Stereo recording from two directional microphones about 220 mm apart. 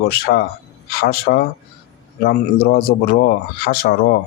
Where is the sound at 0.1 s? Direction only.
45° left (ahead or behind).